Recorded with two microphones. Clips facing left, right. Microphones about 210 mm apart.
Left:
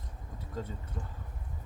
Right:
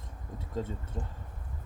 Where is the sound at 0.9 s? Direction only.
30° right (ahead or behind).